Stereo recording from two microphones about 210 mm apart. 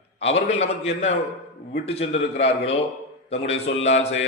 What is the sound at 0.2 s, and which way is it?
A man's voice, 30° left (ahead or behind).